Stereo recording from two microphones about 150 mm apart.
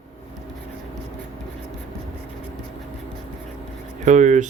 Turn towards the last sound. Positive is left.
turn(degrees=-55)  # may be behind; listen again after turning